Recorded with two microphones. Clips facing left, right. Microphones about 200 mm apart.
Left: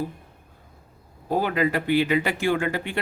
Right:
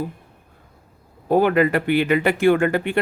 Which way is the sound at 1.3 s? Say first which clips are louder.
Right 6 dB; 60° right (ahead or behind).